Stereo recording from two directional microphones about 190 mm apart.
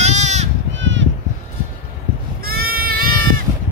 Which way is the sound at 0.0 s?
35° right (ahead or behind).